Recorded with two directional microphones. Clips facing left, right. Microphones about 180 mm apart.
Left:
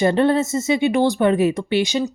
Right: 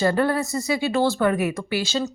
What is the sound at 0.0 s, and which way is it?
Speech, 25° left (ahead or behind).